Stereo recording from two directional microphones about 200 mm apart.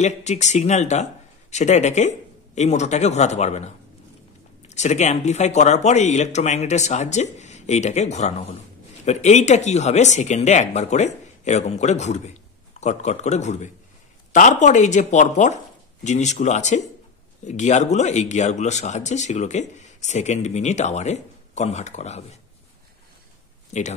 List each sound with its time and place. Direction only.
0.0 s speech: 35° left (ahead or behind)
23.7 s speech: 35° left (ahead or behind)